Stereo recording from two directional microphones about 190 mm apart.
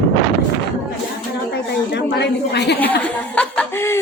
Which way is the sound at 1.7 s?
60° left (ahead or behind).